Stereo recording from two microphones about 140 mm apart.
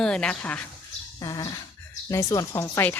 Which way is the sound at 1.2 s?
25° left (ahead or behind).